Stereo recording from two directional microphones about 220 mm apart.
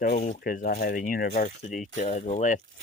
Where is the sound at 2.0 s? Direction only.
25° left (ahead or behind).